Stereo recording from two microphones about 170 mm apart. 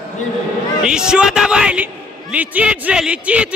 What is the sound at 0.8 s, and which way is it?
A man's voice, 5° right (ahead or behind).